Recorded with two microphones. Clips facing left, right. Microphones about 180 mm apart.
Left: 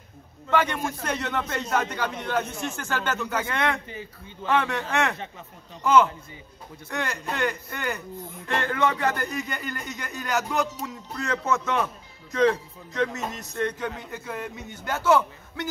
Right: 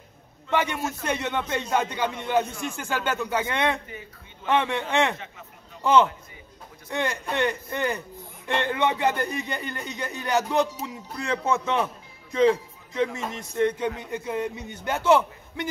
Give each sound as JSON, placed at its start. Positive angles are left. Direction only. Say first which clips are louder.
{"t": 0.5, "sound": "a man's voice", "louder": "left 1 dB", "side_deg": -15}
{"t": 6.9, "sound": "a man's voice", "louder": "right 3 dB", "side_deg": -25}
{"t": 10.9, "sound": "a man's voice", "louder": "right 1 dB", "side_deg": -10}